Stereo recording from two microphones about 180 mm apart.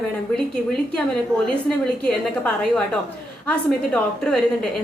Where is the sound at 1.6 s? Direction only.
5° left (ahead or behind).